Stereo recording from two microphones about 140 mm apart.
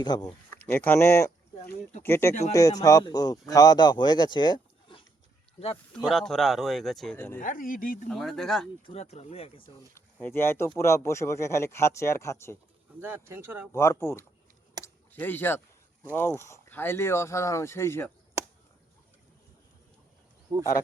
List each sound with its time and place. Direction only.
0.0 s speech: 30° left (ahead or behind)
0.6 s speech: 10° left (ahead or behind); by 5.0 s 35° left (ahead or behind)
6.0 s speech: centre (ahead or behind)
7.3 s speech: 75° left (ahead or behind)
8.0 s speech: centre (ahead or behind)
8.9 s speech: 50° left (ahead or behind)
9.9 s speech: 15° left (ahead or behind)
13.0 s speech: 15° right (ahead or behind)
13.7 s speech: 20° left (ahead or behind)